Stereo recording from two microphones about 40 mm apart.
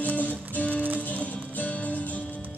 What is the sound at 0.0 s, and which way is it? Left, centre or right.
Music, left.